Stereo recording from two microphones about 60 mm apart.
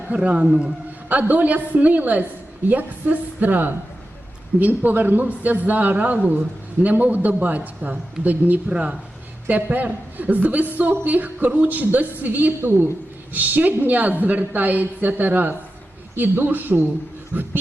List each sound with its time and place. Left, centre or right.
0.1 s a woman's voice: right